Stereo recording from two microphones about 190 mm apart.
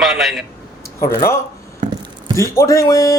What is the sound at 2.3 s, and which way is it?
Speech, 15° left (ahead or behind).